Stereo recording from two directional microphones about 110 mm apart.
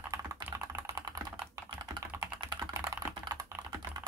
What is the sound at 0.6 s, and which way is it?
Typing, 30° right (ahead or behind).